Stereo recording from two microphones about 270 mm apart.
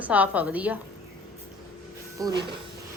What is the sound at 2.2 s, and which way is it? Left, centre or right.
Speech, centre.